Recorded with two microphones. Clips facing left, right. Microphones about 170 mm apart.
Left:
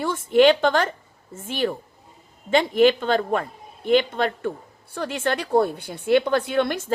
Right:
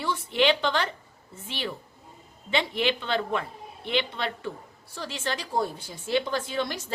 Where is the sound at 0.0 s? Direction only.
50° left (ahead or behind).